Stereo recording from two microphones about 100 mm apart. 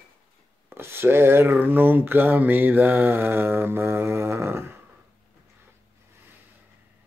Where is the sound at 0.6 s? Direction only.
25° right (ahead or behind).